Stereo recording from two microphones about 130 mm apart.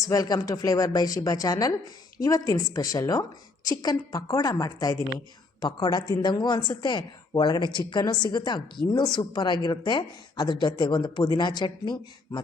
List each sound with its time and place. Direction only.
0.0 s a woman's voice: 30° left (ahead or behind)